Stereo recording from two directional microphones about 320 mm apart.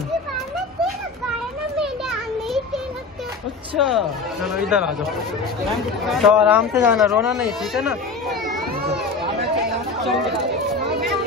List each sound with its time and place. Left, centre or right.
1.8 s a sound: centre
3.7 s speech: centre
6.0 s speech: centre
10.8 s chatter: right